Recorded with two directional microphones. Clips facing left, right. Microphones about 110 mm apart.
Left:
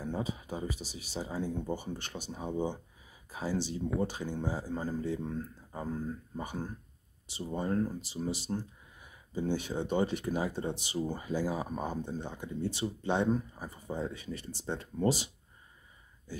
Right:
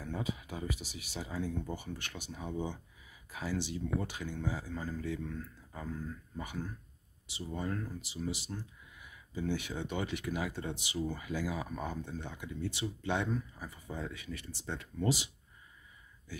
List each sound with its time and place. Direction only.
0.0 s speech: 30° left (ahead or behind)